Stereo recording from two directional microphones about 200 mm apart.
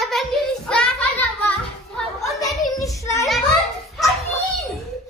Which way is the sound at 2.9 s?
15° left (ahead or behind).